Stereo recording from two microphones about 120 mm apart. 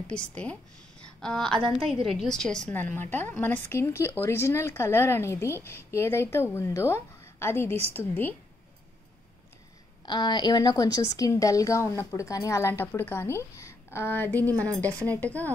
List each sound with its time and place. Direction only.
0.0 s a woman's voice: 10° left (ahead or behind)
10.0 s a woman's voice: 35° left (ahead or behind); by 15.5 s 15° left (ahead or behind)